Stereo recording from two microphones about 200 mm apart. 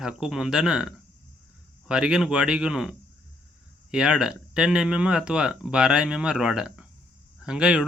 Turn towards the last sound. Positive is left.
turn(degrees=-5)  # may be behind; listen again after turning